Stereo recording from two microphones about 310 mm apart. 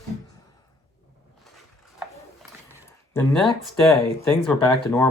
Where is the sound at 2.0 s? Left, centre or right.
Centre.